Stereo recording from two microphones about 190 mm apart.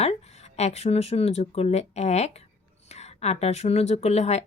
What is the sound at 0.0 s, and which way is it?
Speech, 35° left (ahead or behind).